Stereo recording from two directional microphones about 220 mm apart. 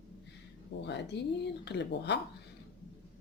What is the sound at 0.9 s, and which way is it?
Speech, 50° left (ahead or behind).